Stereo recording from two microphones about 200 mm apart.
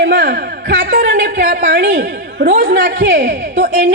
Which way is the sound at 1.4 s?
60° right (ahead or behind).